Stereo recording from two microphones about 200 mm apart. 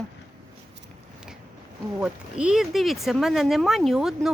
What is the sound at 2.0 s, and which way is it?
A child's voice, 5° right (ahead or behind).